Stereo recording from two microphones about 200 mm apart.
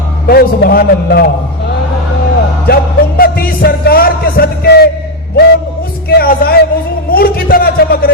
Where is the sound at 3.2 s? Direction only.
45° left (ahead or behind).